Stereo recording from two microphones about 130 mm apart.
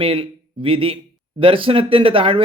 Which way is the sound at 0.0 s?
45° right (ahead or behind).